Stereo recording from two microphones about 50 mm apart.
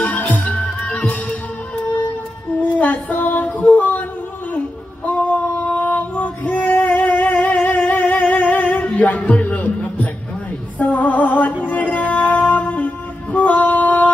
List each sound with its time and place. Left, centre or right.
0.0 s music: left
2.5 s music: left
3.2 s female singing: left
5.0 s female singing: left
9.4 s music: left
12.3 s a sound: left